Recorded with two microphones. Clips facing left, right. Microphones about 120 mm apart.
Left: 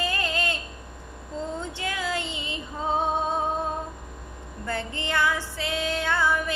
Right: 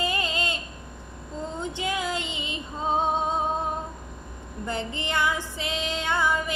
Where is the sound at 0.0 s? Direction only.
20° right (ahead or behind).